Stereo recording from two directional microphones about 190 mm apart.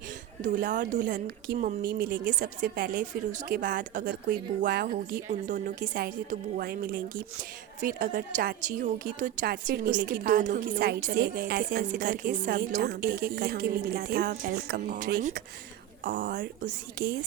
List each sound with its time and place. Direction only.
0.4 s speech: 45° right (ahead or behind)
5.3 s a woman's voice: 45° right (ahead or behind); by 10.1 s 65° right (ahead or behind)
10.1 s speech: 45° right (ahead or behind)